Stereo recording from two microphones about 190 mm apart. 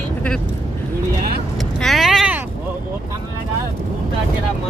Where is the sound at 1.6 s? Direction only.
Centre (ahead or behind).